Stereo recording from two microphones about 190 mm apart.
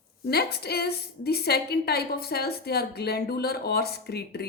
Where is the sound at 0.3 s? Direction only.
55° left (ahead or behind).